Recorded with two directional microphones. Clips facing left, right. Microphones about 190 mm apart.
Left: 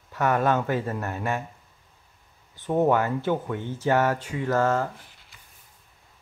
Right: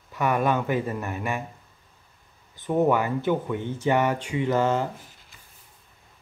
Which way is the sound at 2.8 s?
10° right (ahead or behind).